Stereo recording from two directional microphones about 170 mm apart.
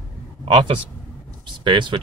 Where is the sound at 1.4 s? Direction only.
30° right (ahead or behind).